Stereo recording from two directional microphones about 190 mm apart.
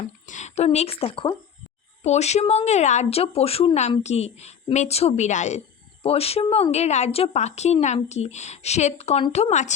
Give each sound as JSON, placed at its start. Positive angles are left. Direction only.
{"t": 0.3, "sound": "a woman's voice", "side_deg": 40}